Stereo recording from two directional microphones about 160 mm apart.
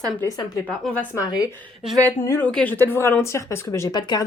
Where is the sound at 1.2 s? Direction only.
20° left (ahead or behind).